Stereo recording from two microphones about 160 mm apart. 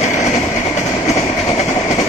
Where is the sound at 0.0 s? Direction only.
45° left (ahead or behind).